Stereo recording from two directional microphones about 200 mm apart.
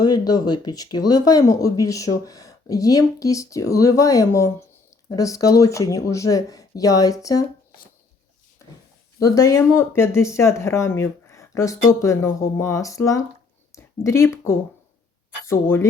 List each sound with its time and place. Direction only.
0.0 s speech: 20° left (ahead or behind)
9.1 s speech: 15° left (ahead or behind)